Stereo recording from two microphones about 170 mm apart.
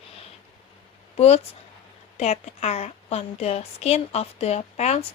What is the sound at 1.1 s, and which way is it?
A woman's voice, 40° left (ahead or behind).